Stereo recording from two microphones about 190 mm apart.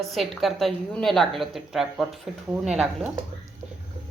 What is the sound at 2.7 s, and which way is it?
Speech, 35° right (ahead or behind).